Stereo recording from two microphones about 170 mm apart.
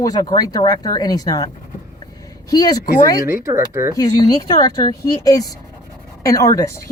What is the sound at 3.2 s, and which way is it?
Speech, 15° right (ahead or behind).